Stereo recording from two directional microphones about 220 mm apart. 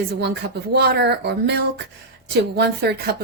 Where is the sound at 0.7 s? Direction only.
50° right (ahead or behind).